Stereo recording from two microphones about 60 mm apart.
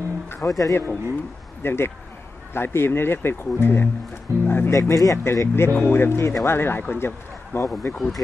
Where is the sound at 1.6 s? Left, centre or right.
Left.